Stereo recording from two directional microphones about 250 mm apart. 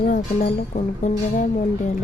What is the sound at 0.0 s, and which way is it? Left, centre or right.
Speech, left.